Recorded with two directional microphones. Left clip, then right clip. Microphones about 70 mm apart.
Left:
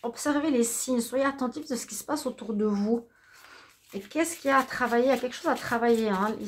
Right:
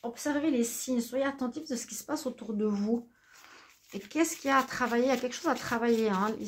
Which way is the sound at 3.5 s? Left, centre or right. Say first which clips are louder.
Left 4 dB; centre.